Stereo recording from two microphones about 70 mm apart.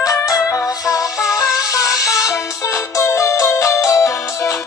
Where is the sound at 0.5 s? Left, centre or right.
Left.